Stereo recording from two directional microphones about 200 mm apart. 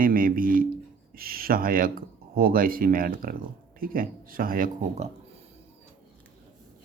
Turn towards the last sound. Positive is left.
turn(degrees=-45)  # may be behind; listen again after turning